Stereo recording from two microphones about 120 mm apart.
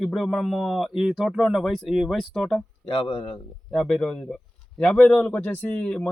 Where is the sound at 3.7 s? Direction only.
5° left (ahead or behind).